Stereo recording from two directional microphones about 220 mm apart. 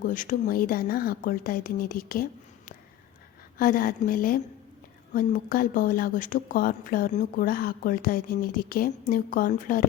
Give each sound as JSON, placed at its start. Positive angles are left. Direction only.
{"t": 0.0, "sound": "a woman's voice", "side_deg": 35}
{"t": 3.6, "sound": "a woman's voice", "side_deg": 40}